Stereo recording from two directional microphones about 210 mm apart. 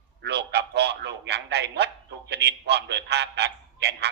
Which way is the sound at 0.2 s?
55° right (ahead or behind).